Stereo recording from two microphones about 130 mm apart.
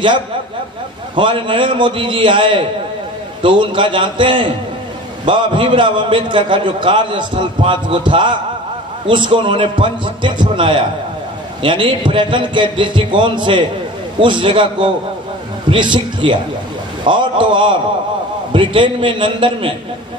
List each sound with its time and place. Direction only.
1.1 s a man's voice: 40° right (ahead or behind)